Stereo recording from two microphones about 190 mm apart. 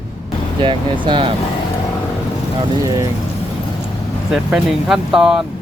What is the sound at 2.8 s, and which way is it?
Speech, 15° right (ahead or behind).